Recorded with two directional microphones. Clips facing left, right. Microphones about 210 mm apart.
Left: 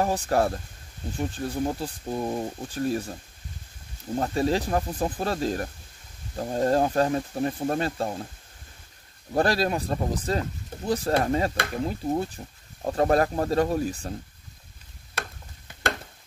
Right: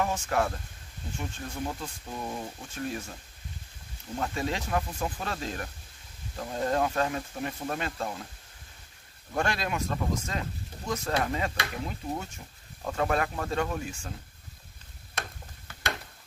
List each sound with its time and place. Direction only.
0.0 s speech: 35° left (ahead or behind)
4.2 s speech: 35° left (ahead or behind)
9.3 s speech: 35° left (ahead or behind)